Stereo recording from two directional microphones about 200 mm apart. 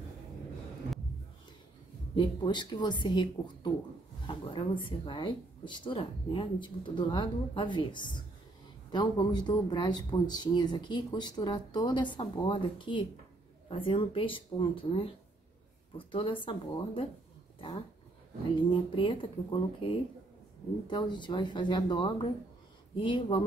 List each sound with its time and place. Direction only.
2.1 s speech: 20° left (ahead or behind)
4.3 s speech: 25° left (ahead or behind)
18.5 s speech: 25° left (ahead or behind)